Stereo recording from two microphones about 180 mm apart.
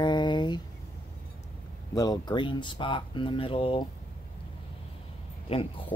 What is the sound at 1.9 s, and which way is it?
A woman's voice, 20° left (ahead or behind).